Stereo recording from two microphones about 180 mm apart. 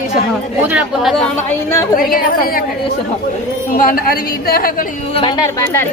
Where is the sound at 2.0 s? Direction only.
55° left (ahead or behind).